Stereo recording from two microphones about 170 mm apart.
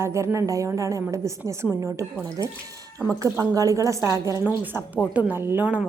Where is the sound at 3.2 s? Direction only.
20° right (ahead or behind).